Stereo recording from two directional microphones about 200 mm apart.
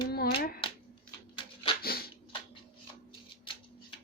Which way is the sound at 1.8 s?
50° left (ahead or behind).